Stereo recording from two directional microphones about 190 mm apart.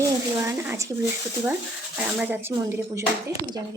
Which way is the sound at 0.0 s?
15° right (ahead or behind).